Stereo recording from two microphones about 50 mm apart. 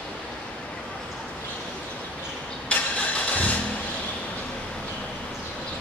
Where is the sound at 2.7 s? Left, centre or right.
Left.